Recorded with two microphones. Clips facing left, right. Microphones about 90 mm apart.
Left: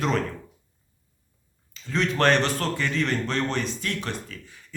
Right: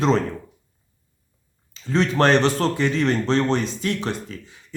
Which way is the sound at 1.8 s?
35° right (ahead or behind).